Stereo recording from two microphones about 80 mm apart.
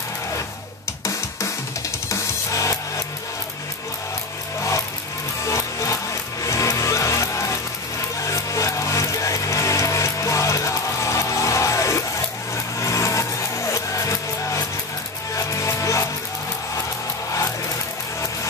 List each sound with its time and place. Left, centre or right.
2.0 s music: left
5.4 s music: left